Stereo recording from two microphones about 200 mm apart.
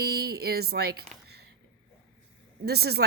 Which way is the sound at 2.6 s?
55° right (ahead or behind).